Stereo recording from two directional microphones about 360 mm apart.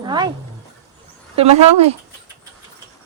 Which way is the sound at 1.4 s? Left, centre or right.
Centre.